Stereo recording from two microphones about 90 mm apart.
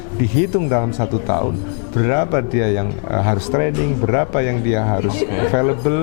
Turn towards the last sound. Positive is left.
turn(degrees=15)  # may be behind; listen again after turning